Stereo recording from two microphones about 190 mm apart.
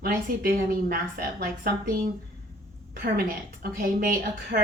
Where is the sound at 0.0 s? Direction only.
50° right (ahead or behind).